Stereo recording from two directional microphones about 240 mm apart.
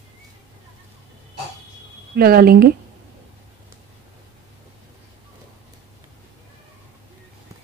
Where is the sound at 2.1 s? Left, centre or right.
Right.